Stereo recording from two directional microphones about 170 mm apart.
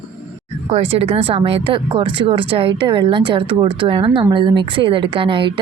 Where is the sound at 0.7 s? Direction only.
35° right (ahead or behind).